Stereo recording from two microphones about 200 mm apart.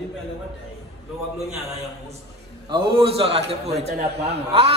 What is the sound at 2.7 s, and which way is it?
A man's voice, 25° right (ahead or behind).